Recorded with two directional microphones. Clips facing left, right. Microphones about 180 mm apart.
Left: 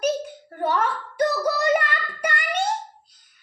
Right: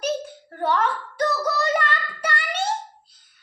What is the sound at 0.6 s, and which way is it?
Child singing, 10° left (ahead or behind).